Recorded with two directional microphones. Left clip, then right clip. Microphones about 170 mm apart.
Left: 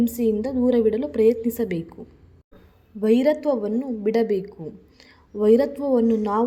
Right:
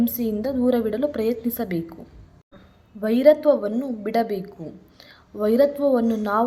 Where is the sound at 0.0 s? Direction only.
20° left (ahead or behind).